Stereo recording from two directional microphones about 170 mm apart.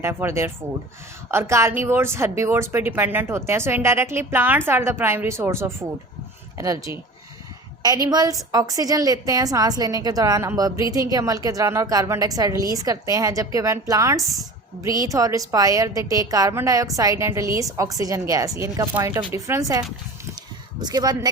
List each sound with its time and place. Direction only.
0.0 s a woman's voice: 15° right (ahead or behind)